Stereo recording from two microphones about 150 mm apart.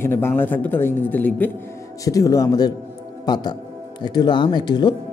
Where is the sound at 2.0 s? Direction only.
25° left (ahead or behind).